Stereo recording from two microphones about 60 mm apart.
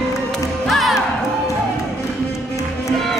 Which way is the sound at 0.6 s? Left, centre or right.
Centre.